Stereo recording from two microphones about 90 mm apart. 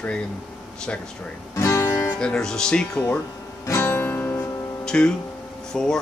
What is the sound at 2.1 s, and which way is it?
Speech, 5° left (ahead or behind).